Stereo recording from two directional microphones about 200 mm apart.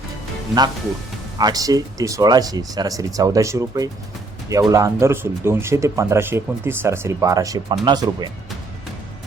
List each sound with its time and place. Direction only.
1.4 s speech: 20° right (ahead or behind)